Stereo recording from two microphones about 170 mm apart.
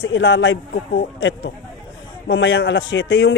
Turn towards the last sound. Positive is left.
turn(degrees=90)